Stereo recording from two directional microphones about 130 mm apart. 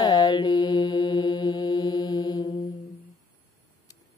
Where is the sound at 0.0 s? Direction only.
30° left (ahead or behind).